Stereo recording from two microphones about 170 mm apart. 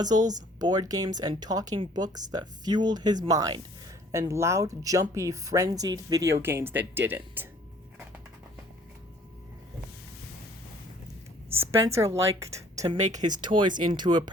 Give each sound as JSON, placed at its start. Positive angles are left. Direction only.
{"t": 0.0, "sound": "speech", "side_deg": -25}
{"t": 11.5, "sound": "speech", "side_deg": -15}